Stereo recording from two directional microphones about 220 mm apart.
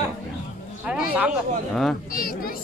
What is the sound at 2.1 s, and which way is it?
Speech, 40° left (ahead or behind).